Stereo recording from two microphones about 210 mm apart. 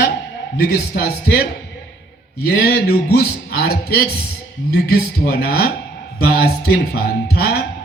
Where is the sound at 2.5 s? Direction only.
45° left (ahead or behind).